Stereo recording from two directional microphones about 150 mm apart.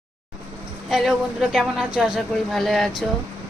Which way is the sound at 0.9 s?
Centre (ahead or behind).